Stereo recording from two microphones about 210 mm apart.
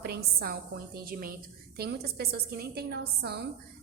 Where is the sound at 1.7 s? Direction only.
50° right (ahead or behind).